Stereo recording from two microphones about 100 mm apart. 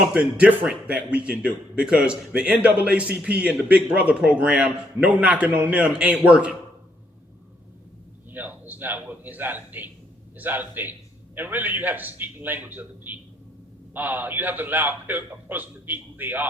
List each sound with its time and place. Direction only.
0.1 s speech: 15° right (ahead or behind)
8.3 s a man's voice: 20° right (ahead or behind)